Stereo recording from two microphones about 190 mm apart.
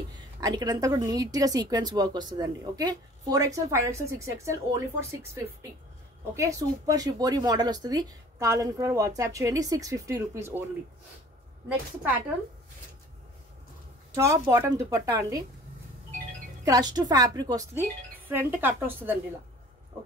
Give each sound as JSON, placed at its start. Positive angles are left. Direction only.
{"t": 0.4, "sound": "speech", "side_deg": -20}
{"t": 14.1, "sound": "speech", "side_deg": -15}
{"t": 16.6, "sound": "speech", "side_deg": -20}